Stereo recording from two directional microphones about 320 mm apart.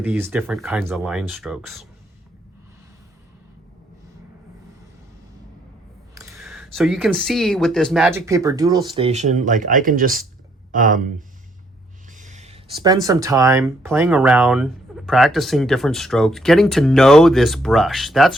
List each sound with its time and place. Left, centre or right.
0.0 s speech: centre
6.1 s speech: centre; by 11.1 s right
12.1 s speech: right; by 18.3 s centre